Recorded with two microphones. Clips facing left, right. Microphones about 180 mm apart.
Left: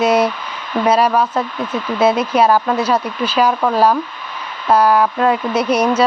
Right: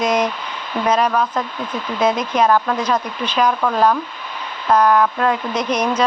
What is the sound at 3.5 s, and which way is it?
Speech, 20° left (ahead or behind).